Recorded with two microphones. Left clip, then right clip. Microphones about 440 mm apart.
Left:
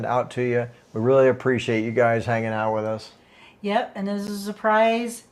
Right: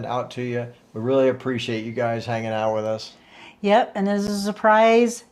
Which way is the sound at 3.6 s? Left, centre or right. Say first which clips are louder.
Right 6 dB; right.